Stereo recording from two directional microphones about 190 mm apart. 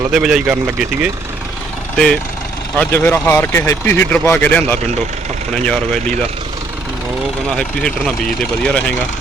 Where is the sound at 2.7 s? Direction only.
10° left (ahead or behind).